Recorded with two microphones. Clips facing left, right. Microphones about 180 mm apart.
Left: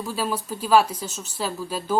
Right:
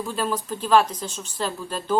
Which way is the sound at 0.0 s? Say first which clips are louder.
Right 1 dB; 5° left (ahead or behind).